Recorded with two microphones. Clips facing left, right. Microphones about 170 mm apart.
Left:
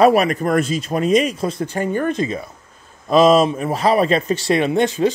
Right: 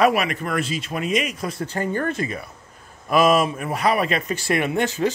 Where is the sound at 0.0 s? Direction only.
35° left (ahead or behind).